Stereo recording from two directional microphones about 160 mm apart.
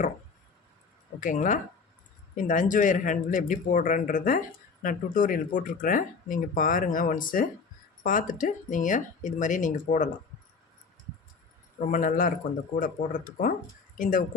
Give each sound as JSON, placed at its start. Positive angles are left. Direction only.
{"t": 1.2, "sound": "a man's voice", "side_deg": 55}
{"t": 11.8, "sound": "a man's voice", "side_deg": 55}